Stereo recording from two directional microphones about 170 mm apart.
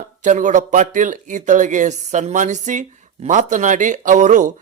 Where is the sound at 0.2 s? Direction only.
45° right (ahead or behind).